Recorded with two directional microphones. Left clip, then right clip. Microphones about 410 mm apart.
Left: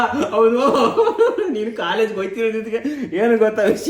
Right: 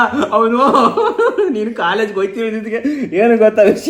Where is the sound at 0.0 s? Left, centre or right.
Centre.